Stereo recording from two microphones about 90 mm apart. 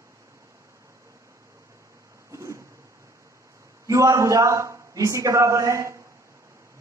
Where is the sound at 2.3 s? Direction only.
35° right (ahead or behind).